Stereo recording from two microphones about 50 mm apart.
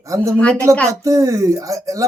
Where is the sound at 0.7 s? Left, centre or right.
Right.